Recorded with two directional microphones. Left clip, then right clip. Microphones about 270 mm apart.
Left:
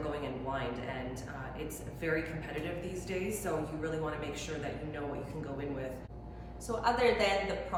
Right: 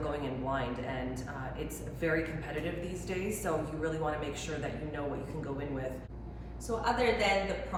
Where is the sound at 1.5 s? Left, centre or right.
Centre.